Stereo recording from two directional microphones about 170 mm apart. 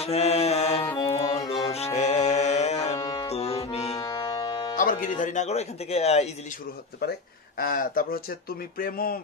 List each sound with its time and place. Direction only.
0.0 s music: 40° left (ahead or behind)
4.0 s music: 25° left (ahead or behind)
4.7 s speech: 50° left (ahead or behind)
7.0 s speech: 60° left (ahead or behind)